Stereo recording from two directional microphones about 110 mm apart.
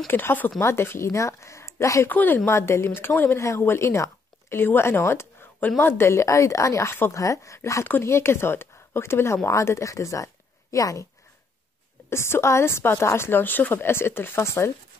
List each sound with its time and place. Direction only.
0.1 s speech: 20° left (ahead or behind)
2.0 s speech: 15° left (ahead or behind)
12.1 s speech: 25° left (ahead or behind)